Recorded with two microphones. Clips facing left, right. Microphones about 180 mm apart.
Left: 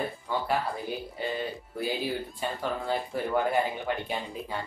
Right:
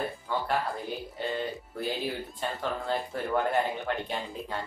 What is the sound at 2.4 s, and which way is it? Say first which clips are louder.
Speech: even; 5° left (ahead or behind).